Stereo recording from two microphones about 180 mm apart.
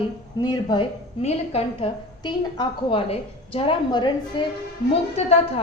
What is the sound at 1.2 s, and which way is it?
A woman's voice, 35° left (ahead or behind).